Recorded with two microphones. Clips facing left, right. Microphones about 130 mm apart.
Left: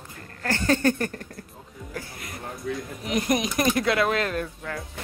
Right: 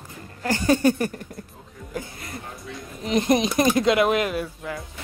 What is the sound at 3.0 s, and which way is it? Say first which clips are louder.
Speech: right 5 dB; 25° right (ahead or behind).